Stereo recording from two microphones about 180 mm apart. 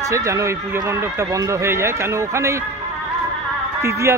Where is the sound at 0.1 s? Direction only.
15° right (ahead or behind).